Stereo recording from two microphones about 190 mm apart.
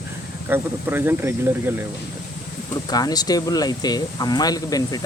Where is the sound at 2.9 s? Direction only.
20° left (ahead or behind).